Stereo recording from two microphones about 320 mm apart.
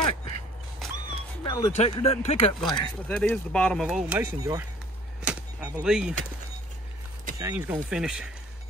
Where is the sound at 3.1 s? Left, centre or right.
Centre.